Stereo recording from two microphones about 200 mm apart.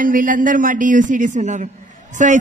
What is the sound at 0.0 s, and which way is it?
Speech, 45° right (ahead or behind).